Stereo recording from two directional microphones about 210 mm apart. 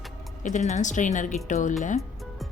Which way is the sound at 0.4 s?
35° left (ahead or behind).